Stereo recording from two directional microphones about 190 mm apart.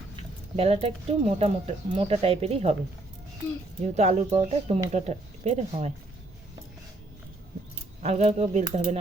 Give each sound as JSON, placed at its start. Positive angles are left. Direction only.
{"t": 0.5, "sound": "speech", "side_deg": -30}
{"t": 3.9, "sound": "speech", "side_deg": -35}
{"t": 8.0, "sound": "speech", "side_deg": -35}